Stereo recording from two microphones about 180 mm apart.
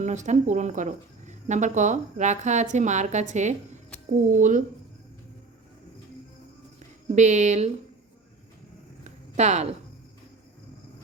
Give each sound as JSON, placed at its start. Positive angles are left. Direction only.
{"t": 0.0, "sound": "speech", "side_deg": -40}
{"t": 7.2, "sound": "speech", "side_deg": -40}
{"t": 9.0, "sound": "a sound", "side_deg": -40}